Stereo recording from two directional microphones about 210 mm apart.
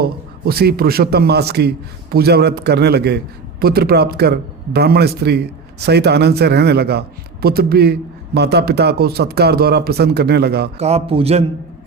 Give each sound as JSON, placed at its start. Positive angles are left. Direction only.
{"t": 0.0, "sound": "a man's voice", "side_deg": -45}
{"t": 10.8, "sound": "a man's voice", "side_deg": -30}